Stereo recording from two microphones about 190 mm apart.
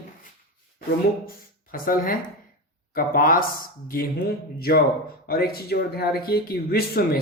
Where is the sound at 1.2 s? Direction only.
45° left (ahead or behind).